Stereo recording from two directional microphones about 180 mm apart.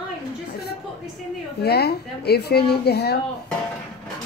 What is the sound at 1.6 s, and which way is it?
Speech, 65° left (ahead or behind).